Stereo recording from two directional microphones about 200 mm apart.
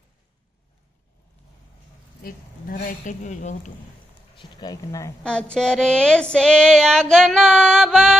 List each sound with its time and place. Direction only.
2.2 s a woman's voice: 45° left (ahead or behind)
4.4 s speech: 20° left (ahead or behind)
5.2 s female singing: 5° left (ahead or behind)